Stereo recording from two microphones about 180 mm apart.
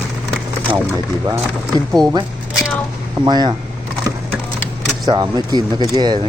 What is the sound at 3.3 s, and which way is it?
Speech, 25° right (ahead or behind).